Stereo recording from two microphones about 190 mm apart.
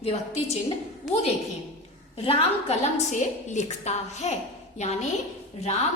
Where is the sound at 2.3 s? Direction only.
30° left (ahead or behind).